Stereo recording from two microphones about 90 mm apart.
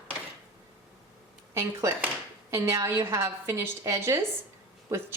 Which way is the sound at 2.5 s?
30° right (ahead or behind).